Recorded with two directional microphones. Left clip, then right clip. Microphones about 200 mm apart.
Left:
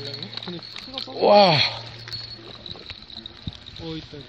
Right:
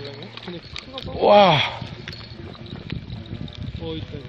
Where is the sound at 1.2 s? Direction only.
5° left (ahead or behind).